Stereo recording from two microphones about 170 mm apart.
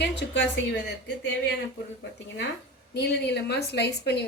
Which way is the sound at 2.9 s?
80° left.